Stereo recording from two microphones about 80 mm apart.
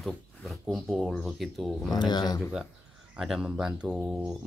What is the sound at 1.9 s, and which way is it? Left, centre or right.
Speech, left.